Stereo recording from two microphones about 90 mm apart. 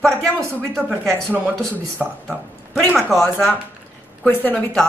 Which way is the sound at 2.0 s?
10° right (ahead or behind).